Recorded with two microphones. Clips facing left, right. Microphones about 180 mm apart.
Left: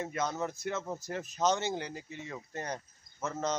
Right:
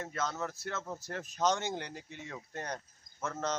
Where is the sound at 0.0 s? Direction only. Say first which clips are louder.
Left 3 dB; 15° left (ahead or behind).